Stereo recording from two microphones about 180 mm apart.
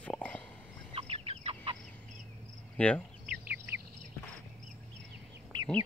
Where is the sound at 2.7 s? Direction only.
5° left (ahead or behind).